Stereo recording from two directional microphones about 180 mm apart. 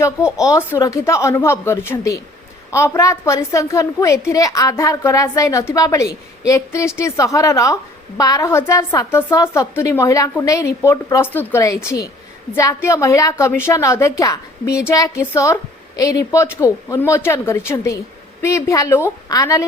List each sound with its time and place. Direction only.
0.4 s a woman's voice: 15° left (ahead or behind)